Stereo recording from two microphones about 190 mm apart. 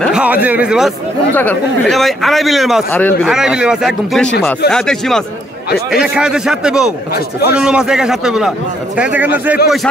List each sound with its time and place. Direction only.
0.0 s a man's voice: 5° right (ahead or behind)
1.3 s a man's voice: 10° left (ahead or behind)
2.9 s speech: 10° left (ahead or behind)
3.3 s a man's voice: 5° right (ahead or behind)